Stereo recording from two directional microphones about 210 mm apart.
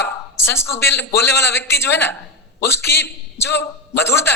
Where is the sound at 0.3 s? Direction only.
10° left (ahead or behind).